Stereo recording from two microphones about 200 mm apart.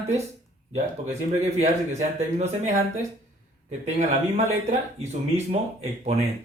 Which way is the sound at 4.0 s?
35° right (ahead or behind).